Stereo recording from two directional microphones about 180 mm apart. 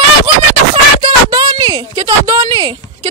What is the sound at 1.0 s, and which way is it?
Speech, 25° right (ahead or behind).